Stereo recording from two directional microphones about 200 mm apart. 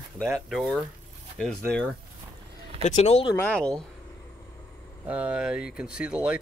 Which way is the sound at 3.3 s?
5° left (ahead or behind).